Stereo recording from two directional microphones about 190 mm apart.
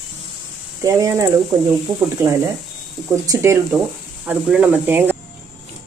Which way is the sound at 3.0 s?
5° right (ahead or behind).